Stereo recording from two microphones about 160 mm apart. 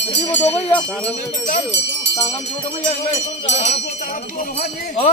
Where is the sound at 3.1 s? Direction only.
45° left (ahead or behind).